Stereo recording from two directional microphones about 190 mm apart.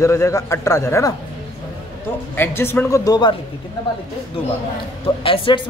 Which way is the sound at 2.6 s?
10° left (ahead or behind).